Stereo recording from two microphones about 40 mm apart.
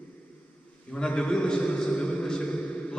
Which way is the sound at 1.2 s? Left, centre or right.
Left.